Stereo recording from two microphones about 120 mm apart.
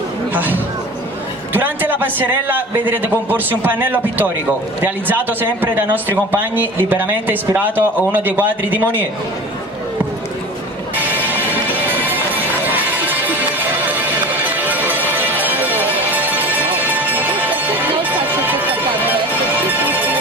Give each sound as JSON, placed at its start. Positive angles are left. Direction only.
{"t": 0.3, "sound": "a man's voice", "side_deg": -15}
{"t": 11.0, "sound": "music", "side_deg": -15}